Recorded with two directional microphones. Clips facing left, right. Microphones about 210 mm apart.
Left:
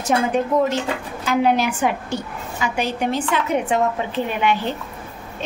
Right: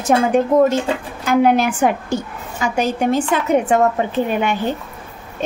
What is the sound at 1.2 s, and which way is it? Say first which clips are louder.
A woman's voice: right 4 dB; 50° right (ahead or behind).